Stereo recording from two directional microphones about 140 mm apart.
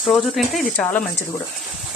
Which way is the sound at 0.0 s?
Centre (ahead or behind).